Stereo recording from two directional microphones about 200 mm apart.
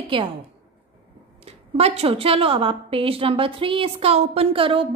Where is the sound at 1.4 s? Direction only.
30° right (ahead or behind).